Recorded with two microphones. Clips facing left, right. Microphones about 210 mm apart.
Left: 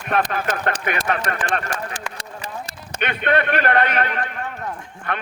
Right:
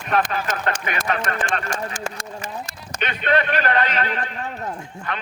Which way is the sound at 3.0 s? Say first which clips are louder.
Left 1 dB; 55° left (ahead or behind).